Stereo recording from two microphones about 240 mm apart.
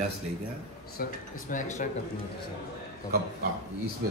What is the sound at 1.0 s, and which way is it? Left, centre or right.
Speech, left.